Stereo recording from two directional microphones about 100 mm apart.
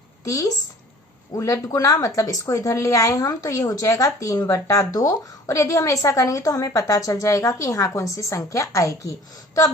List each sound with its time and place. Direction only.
0.3 s a woman's voice: 35° left (ahead or behind)